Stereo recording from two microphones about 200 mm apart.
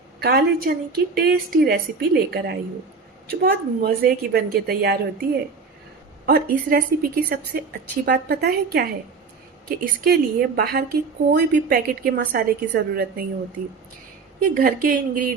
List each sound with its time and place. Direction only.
0.2 s a woman's voice: 50° right (ahead or behind)
14.5 s a woman's voice: 45° right (ahead or behind)